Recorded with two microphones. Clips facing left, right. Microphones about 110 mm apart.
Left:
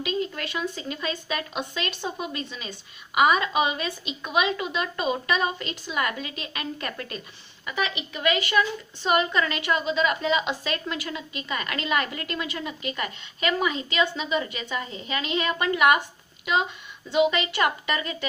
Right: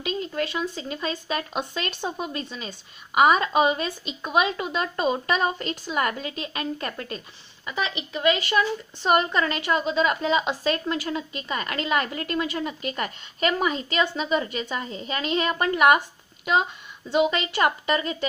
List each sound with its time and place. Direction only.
0.0 s a woman's voice: 30° right (ahead or behind)
17.1 s a woman's voice: 35° right (ahead or behind)